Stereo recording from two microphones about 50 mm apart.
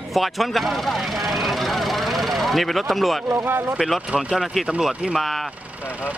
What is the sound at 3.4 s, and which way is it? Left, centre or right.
Speech, right.